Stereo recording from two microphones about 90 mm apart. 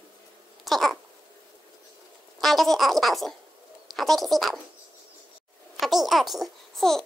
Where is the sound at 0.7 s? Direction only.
Centre (ahead or behind).